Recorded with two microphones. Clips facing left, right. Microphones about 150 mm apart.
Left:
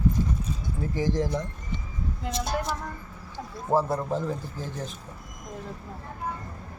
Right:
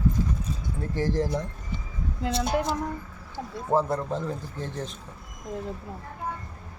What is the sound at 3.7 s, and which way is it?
Speech, 5° left (ahead or behind).